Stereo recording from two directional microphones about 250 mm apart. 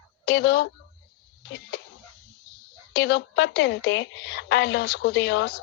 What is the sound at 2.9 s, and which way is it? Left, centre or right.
Speech, left.